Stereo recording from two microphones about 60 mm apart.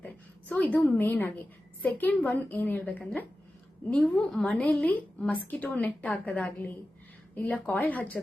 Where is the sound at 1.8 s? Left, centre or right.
Left.